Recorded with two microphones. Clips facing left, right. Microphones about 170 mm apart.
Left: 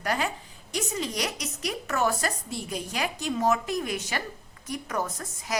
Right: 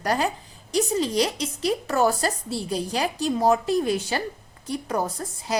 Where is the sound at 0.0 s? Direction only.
35° right (ahead or behind).